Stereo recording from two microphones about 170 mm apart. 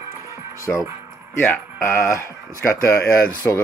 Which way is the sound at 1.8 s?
15° left (ahead or behind).